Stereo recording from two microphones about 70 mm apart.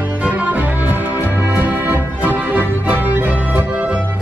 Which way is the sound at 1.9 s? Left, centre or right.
Right.